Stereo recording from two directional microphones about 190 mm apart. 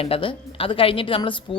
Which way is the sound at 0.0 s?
30° left (ahead or behind).